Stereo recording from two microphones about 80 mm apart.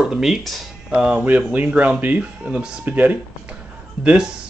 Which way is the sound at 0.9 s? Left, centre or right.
Centre.